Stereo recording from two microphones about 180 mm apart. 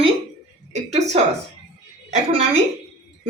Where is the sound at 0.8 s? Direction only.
40° right (ahead or behind).